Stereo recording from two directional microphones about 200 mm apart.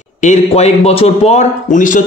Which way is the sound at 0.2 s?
35° left (ahead or behind).